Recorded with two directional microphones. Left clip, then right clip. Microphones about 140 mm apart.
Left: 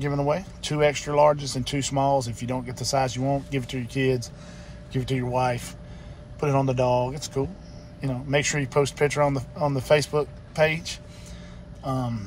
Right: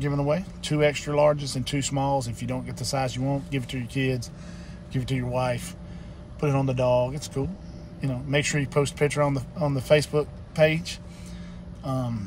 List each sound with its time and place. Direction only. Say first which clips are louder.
0.0 s speech: left 1 dB; 10° right (ahead or behind)